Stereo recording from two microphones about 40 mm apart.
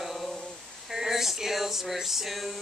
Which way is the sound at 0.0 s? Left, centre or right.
Centre.